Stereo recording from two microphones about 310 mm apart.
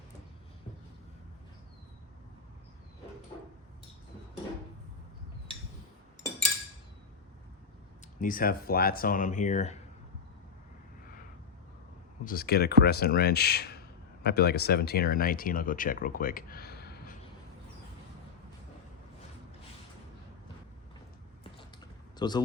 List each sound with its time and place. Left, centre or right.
8.2 s speech: left
12.2 s speech: left
22.2 s speech: centre